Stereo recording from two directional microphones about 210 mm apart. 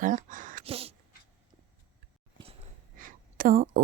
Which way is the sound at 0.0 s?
40° right (ahead or behind).